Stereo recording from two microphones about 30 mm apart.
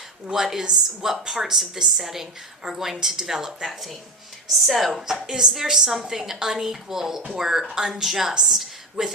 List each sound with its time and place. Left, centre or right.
0.3 s a woman's voice: centre
4.6 s a woman's voice: centre; by 8.0 s right
8.0 s a woman's voice: centre